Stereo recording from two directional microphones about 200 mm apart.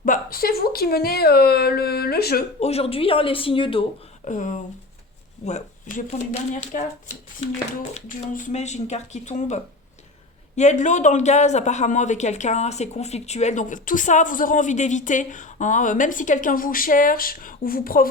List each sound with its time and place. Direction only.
0.0 s speech: 45° left (ahead or behind)
2.6 s speech: 30° left (ahead or behind)
4.3 s speech: 40° left (ahead or behind)
6.1 s speech: 35° left (ahead or behind)